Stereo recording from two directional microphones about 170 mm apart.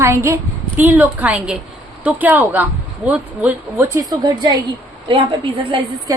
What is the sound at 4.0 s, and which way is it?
Speech, 25° right (ahead or behind).